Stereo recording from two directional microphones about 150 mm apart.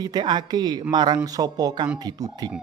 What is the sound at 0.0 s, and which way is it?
A man's voice, 30° right (ahead or behind).